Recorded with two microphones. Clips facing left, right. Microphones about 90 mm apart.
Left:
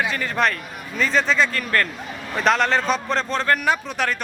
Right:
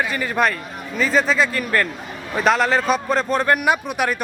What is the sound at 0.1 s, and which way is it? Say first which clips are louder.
A man's voice: right 2 dB; 10° right (ahead or behind).